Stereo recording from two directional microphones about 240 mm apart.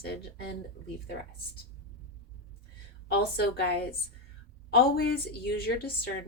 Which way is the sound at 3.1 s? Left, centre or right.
Left.